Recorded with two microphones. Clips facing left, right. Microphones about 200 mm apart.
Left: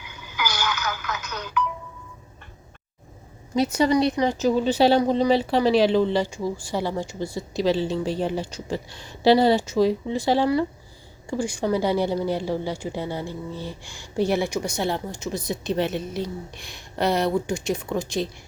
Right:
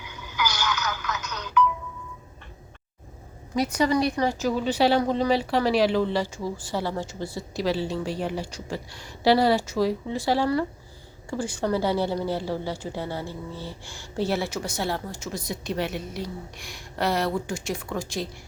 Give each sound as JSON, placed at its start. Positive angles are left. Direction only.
{"t": 0.5, "sound": "telephone", "side_deg": 55}
{"t": 1.3, "sound": "music", "side_deg": 55}
{"t": 3.5, "sound": "a woman's voice", "side_deg": 25}